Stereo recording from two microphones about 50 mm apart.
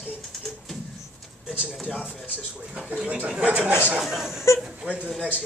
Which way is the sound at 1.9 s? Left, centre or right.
Centre.